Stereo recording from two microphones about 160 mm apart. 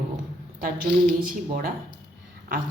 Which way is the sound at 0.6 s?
60° right (ahead or behind).